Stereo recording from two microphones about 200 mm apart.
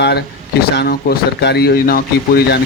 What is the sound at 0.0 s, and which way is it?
Speech, 55° left (ahead or behind).